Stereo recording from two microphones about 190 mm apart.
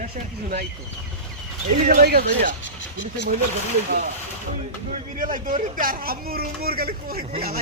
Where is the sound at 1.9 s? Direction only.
50° right (ahead or behind).